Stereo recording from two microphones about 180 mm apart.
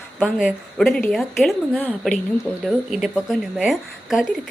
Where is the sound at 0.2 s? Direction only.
5° right (ahead or behind).